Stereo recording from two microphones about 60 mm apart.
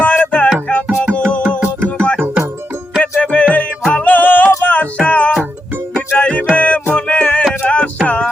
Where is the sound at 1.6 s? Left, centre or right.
Right.